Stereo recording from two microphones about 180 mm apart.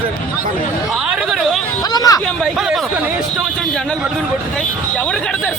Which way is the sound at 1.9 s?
20° left (ahead or behind).